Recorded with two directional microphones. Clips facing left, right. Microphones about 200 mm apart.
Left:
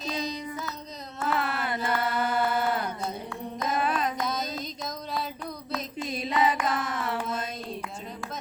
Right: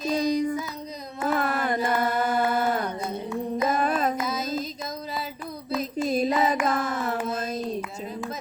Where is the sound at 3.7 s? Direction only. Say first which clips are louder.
Right 1 dB; 45° right (ahead or behind).